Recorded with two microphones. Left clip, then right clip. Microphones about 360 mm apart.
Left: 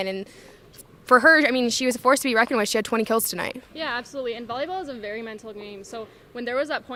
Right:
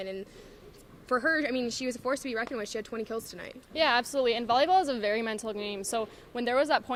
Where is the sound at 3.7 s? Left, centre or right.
Centre.